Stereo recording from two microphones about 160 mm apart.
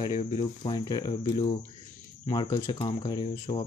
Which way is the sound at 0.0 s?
35° left (ahead or behind).